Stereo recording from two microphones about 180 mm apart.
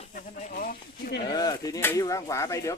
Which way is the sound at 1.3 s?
20° left (ahead or behind).